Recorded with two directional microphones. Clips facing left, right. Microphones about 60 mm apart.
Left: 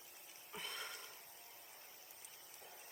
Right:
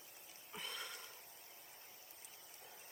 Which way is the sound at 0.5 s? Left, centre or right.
Left.